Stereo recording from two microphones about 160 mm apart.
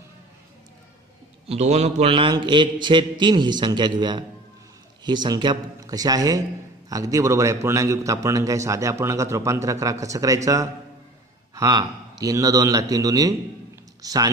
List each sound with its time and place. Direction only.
1.5 s a man's voice: 45° right (ahead or behind); by 14.3 s 25° right (ahead or behind)